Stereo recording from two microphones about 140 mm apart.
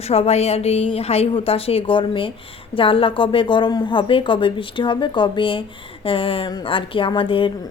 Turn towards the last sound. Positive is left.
turn(degrees=40)  # may be behind; listen again after turning